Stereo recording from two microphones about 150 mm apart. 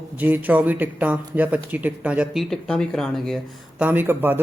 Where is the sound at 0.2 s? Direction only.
10° right (ahead or behind).